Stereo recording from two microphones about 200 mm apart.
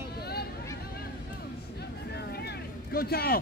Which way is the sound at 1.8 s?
55° left (ahead or behind).